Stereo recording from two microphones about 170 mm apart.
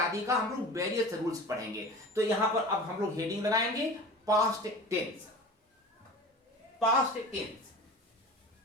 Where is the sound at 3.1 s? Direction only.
20° right (ahead or behind).